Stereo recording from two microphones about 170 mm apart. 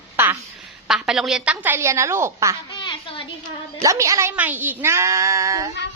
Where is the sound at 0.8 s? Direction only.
Centre (ahead or behind).